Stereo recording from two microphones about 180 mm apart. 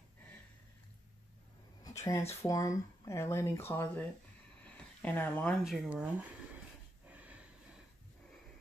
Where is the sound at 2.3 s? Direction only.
15° left (ahead or behind).